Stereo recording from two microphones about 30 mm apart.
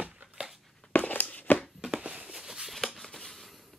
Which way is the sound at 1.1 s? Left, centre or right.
Left.